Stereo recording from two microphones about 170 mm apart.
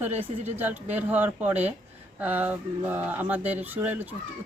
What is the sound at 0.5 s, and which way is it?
Speech, 10° right (ahead or behind).